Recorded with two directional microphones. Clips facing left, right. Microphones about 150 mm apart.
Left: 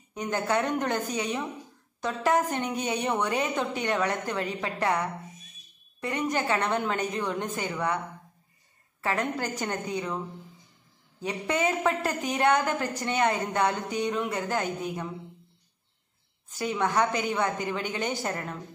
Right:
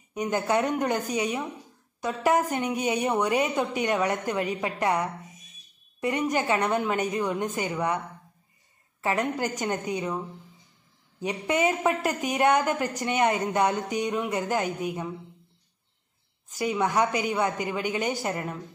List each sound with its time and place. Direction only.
0.1 s a woman's voice: 15° right (ahead or behind)
9.0 s a woman's voice: 15° right (ahead or behind)
16.5 s a woman's voice: 10° right (ahead or behind)